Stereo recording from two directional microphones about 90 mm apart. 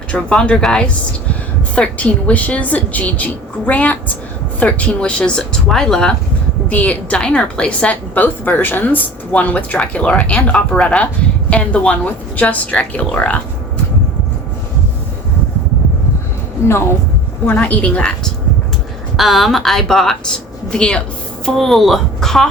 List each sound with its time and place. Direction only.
0.1 s a woman's voice: 10° left (ahead or behind)
6.7 s a woman's voice: 15° left (ahead or behind)
16.6 s speech: 30° left (ahead or behind)
17.4 s a woman's voice: 15° left (ahead or behind)
19.1 s a woman's voice: centre (ahead or behind)